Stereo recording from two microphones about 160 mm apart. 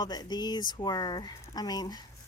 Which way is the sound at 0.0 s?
25° left (ahead or behind).